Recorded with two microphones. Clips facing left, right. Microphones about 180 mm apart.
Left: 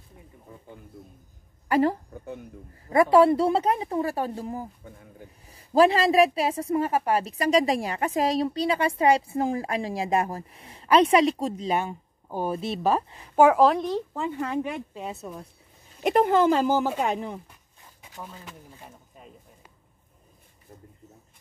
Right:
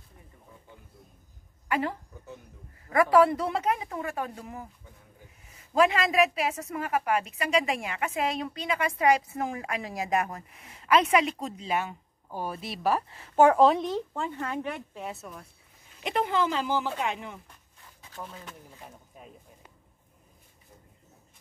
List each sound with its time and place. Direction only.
1.7 s a woman's voice: 40° left (ahead or behind)
2.9 s a woman's voice: 25° left (ahead or behind)
13.4 s speech: 5° left (ahead or behind); by 15.4 s 25° left (ahead or behind)
16.0 s a woman's voice: 45° left (ahead or behind)
18.0 s a sound: 15° left (ahead or behind)